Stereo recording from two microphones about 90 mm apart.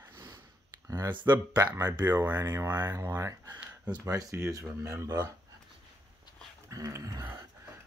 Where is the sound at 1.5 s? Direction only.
45° right (ahead or behind).